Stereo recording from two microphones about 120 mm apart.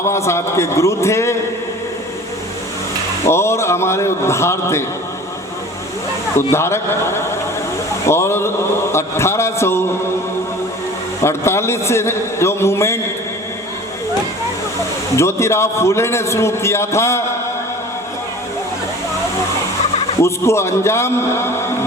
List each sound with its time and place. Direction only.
0.1 s a man's voice: 25° left (ahead or behind)
3.2 s a man's voice: 20° left (ahead or behind)
6.3 s a man's voice: 20° left (ahead or behind)
11.2 s a man's voice: 20° left (ahead or behind)
15.1 s a man's voice: 25° left (ahead or behind)
20.2 s a man's voice: 25° left (ahead or behind)